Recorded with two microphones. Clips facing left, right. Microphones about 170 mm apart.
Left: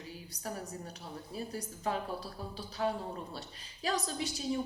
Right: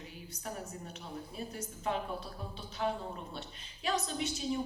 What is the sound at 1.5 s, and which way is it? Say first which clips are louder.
A woman's voice: even; 35° left (ahead or behind).